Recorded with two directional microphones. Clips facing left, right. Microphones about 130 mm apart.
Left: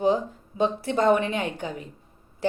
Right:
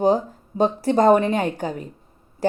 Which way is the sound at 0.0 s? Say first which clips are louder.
Right 4 dB; 40° right (ahead or behind).